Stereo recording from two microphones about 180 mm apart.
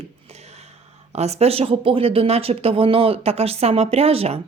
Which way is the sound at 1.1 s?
35° right (ahead or behind).